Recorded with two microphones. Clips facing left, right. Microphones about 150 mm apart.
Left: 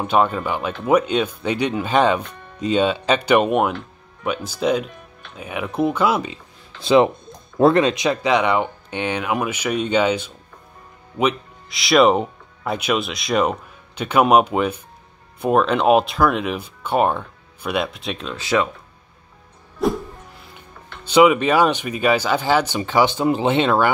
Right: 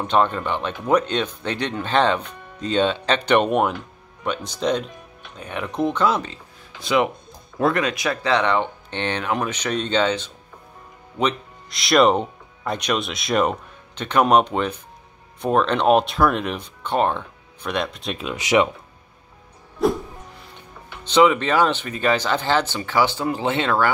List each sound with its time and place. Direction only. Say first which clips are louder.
0.0 s speech: left 1 dB; 5° left (ahead or behind)
6.8 s speech: left 6 dB; 30° left (ahead or behind); by 18.3 s centre (ahead or behind)
18.3 s speech: right 2 dB; 15° right (ahead or behind)
19.8 s speech: right 1 dB; centre (ahead or behind)
21.0 s speech: left 3 dB; 10° left (ahead or behind)